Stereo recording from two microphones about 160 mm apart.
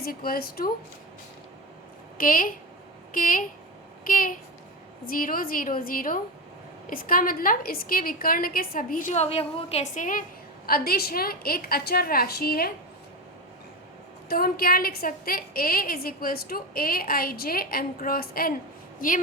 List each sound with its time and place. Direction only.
0.0 s a woman's voice: 70° left (ahead or behind)
2.1 s a woman's voice: 60° left (ahead or behind); by 9.8 s 40° left (ahead or behind)
9.9 s a woman's voice: 55° left (ahead or behind)
10.7 s a woman's voice: 70° left (ahead or behind)
14.3 s a woman's voice: 70° left (ahead or behind)
18.9 s a woman's voice: 55° left (ahead or behind)